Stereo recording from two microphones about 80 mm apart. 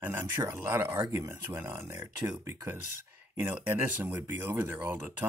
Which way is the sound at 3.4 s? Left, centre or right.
Right.